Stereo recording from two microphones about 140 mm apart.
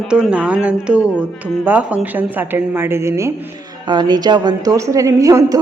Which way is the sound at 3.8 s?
30° right (ahead or behind).